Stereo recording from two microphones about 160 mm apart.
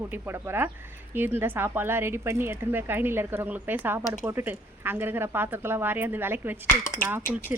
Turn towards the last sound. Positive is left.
turn(degrees=15)  # may be behind; listen again after turning